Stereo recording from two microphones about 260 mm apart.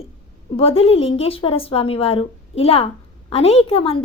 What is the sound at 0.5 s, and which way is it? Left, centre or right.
A woman's voice, left.